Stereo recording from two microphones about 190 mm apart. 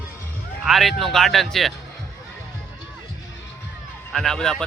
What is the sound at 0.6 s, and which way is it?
Speech, centre (ahead or behind).